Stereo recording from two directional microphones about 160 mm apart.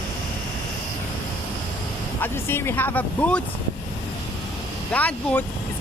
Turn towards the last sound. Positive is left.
turn(degrees=10)  # may be behind; listen again after turning